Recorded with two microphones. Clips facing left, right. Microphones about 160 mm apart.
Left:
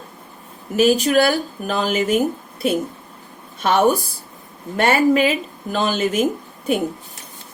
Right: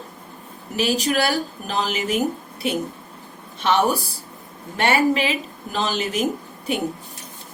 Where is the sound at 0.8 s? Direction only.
45° left (ahead or behind).